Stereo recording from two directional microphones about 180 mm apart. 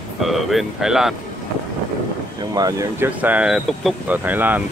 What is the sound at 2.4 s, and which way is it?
Speech, 20° right (ahead or behind).